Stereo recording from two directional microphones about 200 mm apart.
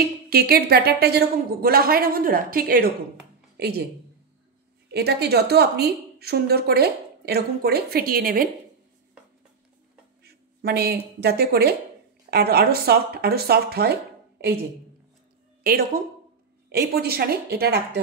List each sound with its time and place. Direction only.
0.3 s a woman's voice: 50° right (ahead or behind)
4.9 s a woman's voice: 55° right (ahead or behind)
10.2 s a woman's voice: 50° right (ahead or behind)
15.6 s a woman's voice: 45° right (ahead or behind)